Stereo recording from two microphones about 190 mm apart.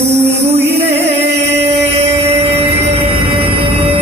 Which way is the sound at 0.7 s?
35° right (ahead or behind).